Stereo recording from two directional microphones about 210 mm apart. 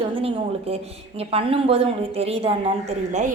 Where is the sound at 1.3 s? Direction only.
25° right (ahead or behind).